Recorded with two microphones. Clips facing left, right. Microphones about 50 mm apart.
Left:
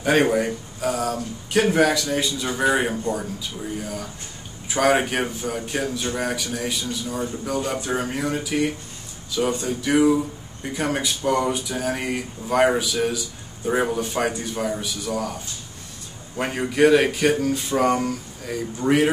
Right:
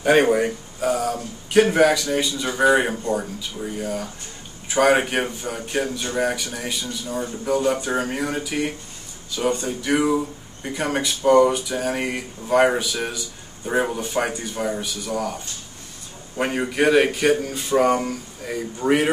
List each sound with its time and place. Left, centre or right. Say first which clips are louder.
0.0 s speech: right 2 dB; centre
16.3 s speech: left 1 dB; centre